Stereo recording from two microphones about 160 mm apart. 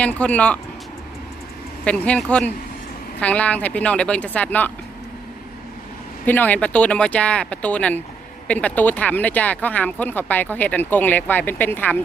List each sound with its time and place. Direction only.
0.0 s speech: 10° left (ahead or behind)
1.8 s speech: 5° left (ahead or behind)
6.2 s speech: 10° left (ahead or behind)